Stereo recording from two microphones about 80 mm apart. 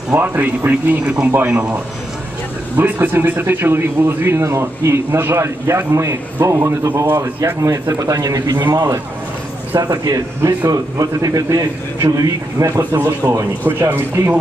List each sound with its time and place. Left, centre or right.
0.1 s speech: right
2.8 s a man's voice: right
9.8 s a man's voice: right
13.7 s speech: right